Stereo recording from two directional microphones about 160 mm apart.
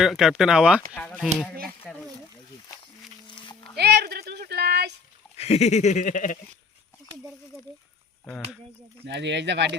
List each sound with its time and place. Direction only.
0.0 s speech: centre (ahead or behind)
1.6 s speech: 5° left (ahead or behind)
3.2 s dog: 30° left (ahead or behind)
3.8 s a sound: 90° right
5.4 s a sound: 40° left (ahead or behind)
9.0 s speech: 90° right